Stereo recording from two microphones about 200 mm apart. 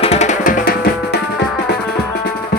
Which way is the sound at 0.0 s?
35° left (ahead or behind).